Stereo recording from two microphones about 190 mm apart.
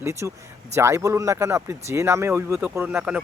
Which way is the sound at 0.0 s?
15° right (ahead or behind).